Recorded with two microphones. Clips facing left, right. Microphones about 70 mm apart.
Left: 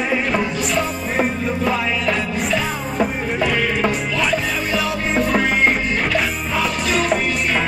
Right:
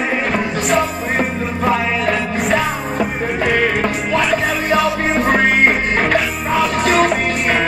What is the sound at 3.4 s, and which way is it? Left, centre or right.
Music, right.